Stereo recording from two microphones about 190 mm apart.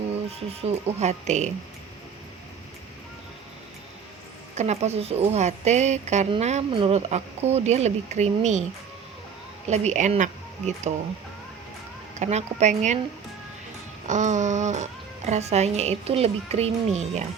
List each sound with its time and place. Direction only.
0.3 s a woman's voice: 30° right (ahead or behind)
4.5 s a woman's voice: 35° right (ahead or behind)
9.6 s a woman's voice: 35° right (ahead or behind)
12.2 s a woman's voice: 35° right (ahead or behind)
14.1 s a woman's voice: 40° right (ahead or behind)